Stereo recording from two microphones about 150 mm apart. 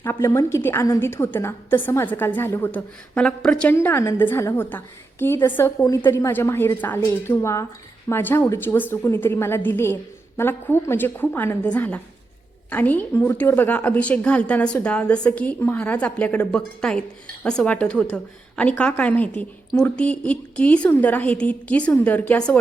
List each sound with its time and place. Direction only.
0.0 s a woman's voice: 20° left (ahead or behind)
3.8 s a woman's voice: 15° left (ahead or behind)